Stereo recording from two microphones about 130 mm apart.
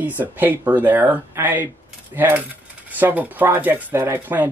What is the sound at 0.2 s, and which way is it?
Speech, 15° right (ahead or behind).